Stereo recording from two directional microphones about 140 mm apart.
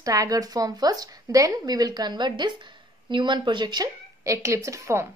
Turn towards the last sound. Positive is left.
turn(degrees=-20)  # may be behind; listen again after turning